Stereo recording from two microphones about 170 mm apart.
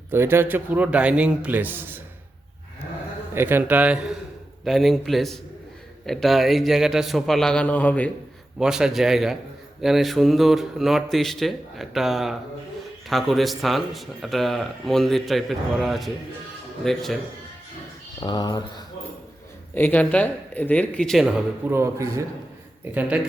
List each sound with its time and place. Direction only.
0.1 s a man's voice: 15° right (ahead or behind)
3.3 s a man's voice: 10° right (ahead or behind); by 8.1 s 10° left (ahead or behind)
8.5 s a man's voice: 5° right (ahead or behind)
18.2 s speech: 25° left (ahead or behind)
19.7 s speech: 10° left (ahead or behind)
21.7 s a man's voice: 15° right (ahead or behind)